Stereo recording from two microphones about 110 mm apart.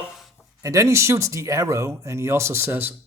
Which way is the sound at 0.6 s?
30° right (ahead or behind).